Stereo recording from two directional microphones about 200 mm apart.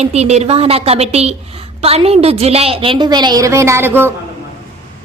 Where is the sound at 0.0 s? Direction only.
30° right (ahead or behind); by 4.1 s 10° right (ahead or behind).